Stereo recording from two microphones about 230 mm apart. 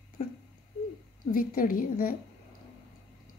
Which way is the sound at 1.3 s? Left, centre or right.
Left.